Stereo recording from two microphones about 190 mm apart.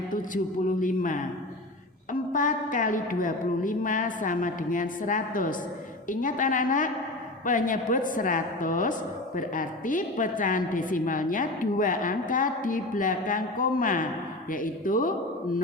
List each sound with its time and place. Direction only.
0.8 s a woman's voice: 45° left (ahead or behind)
2.3 s a woman's voice: 45° left (ahead or behind)